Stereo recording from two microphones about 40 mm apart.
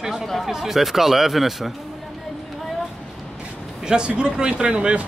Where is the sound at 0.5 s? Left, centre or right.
Centre.